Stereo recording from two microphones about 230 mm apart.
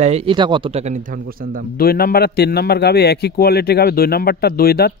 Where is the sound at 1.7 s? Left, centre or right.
Left.